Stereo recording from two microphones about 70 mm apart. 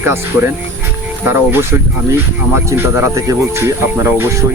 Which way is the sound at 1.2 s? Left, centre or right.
Right.